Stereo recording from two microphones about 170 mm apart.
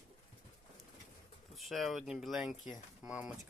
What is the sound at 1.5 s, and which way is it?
Speech, centre (ahead or behind).